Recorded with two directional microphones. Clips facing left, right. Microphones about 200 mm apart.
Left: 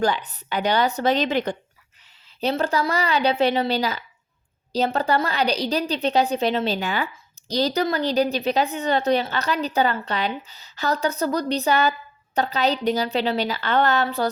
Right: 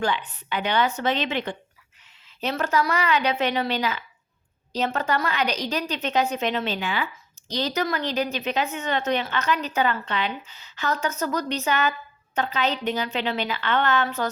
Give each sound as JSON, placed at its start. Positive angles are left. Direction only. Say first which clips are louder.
{"t": 0.0, "sound": "a woman's voice", "louder": "left 3 dB", "side_deg": 40}